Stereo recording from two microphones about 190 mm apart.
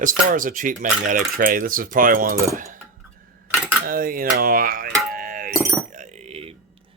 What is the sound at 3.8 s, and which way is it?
Cutlery, 50° right (ahead or behind).